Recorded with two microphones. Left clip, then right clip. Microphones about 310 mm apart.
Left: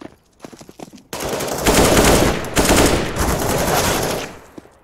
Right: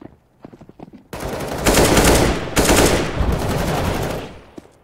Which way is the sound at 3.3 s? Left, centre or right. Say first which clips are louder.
Left 5 dB; left.